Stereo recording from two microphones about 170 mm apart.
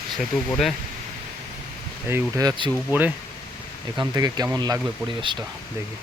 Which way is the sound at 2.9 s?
10° right (ahead or behind).